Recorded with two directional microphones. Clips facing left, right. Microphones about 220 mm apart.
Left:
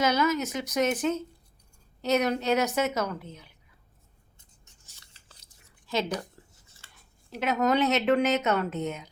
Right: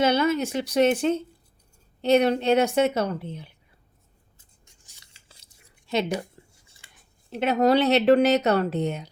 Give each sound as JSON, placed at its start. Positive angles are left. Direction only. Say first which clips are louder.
{"t": 0.0, "sound": "speech", "louder": "right 4 dB", "side_deg": -30}
{"t": 4.4, "sound": "scissors", "louder": "right 1 dB", "side_deg": -15}
{"t": 6.6, "sound": "scissors", "louder": "even", "side_deg": -15}
{"t": 7.3, "sound": "a woman's voice", "louder": "right 5 dB", "side_deg": -30}